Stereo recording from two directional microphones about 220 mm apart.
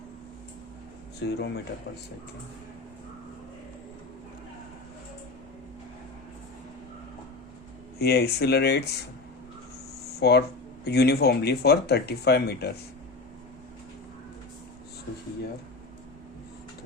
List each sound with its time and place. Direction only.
1.2 s speech: 50° left (ahead or behind)
7.9 s speech: 45° left (ahead or behind)
10.2 s speech: 45° left (ahead or behind)